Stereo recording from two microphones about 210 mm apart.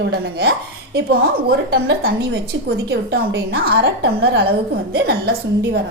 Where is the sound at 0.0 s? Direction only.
50° right (ahead or behind).